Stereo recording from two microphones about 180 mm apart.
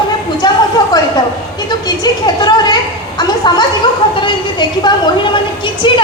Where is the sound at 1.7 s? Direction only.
20° left (ahead or behind).